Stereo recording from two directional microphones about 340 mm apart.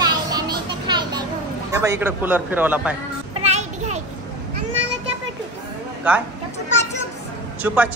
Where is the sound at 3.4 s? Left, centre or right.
Centre.